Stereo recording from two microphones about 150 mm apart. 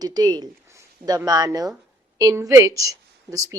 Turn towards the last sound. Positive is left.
turn(degrees=-20)  # may be behind; listen again after turning